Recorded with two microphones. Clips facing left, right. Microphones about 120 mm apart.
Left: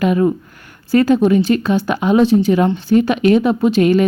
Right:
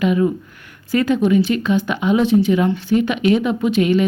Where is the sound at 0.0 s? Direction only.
45° left (ahead or behind).